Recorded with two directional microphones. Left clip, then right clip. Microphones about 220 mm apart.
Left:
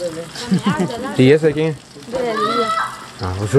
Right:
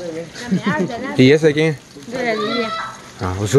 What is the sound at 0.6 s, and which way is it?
Speech, 10° right (ahead or behind).